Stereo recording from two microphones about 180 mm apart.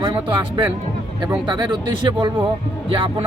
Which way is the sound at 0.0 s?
30° right (ahead or behind).